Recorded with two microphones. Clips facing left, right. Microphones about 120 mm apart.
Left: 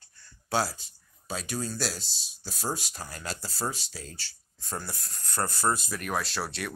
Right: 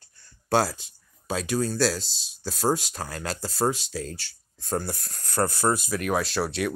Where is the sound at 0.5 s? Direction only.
55° right (ahead or behind).